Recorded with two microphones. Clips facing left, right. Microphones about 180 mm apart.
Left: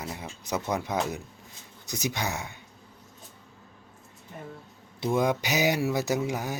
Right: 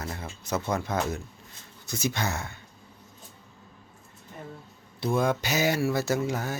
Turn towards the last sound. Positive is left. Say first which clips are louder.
# right 1 dB
turn(degrees=15)  # may be behind; listen again after turning